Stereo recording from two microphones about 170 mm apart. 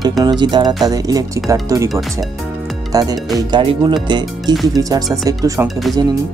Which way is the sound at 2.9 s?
20° right (ahead or behind).